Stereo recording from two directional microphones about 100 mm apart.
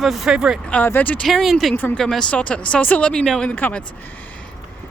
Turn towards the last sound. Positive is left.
turn(degrees=15)  # may be behind; listen again after turning